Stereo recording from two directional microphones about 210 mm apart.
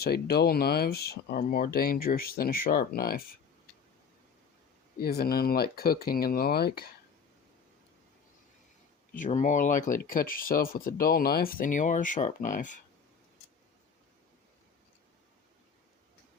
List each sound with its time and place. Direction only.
0.0 s speech: 50° left (ahead or behind)
4.9 s speech: 45° left (ahead or behind)
9.1 s speech: 35° left (ahead or behind)